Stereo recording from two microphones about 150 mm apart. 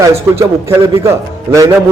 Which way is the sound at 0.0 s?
20° right (ahead or behind).